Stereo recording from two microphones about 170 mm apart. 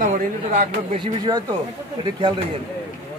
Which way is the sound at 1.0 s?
25° right (ahead or behind).